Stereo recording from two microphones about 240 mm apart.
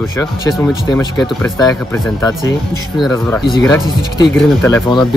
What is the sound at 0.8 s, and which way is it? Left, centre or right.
Speech, centre.